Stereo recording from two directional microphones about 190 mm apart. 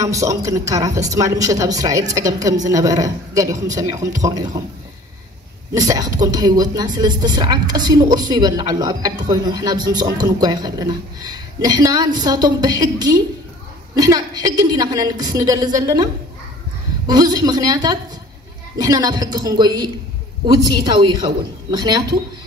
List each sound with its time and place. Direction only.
0.0 s speech: 15° right (ahead or behind)
5.8 s speech: 20° right (ahead or behind)